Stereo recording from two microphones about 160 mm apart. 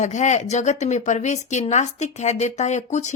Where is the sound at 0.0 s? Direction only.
50° left (ahead or behind).